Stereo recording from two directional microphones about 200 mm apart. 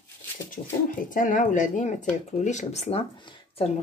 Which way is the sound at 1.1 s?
40° left (ahead or behind).